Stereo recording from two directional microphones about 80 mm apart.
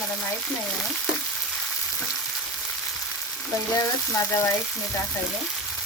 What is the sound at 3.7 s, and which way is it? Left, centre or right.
Frying, left.